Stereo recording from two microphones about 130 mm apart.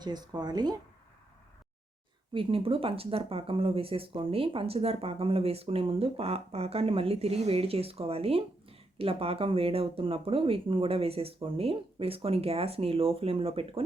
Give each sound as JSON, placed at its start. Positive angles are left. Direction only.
{"t": 0.0, "sound": "speech", "side_deg": -30}
{"t": 2.3, "sound": "speech", "side_deg": -45}